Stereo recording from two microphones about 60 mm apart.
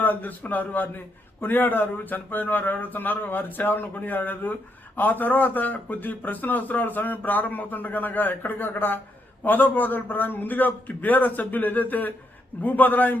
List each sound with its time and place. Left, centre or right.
0.0 s a man's voice: left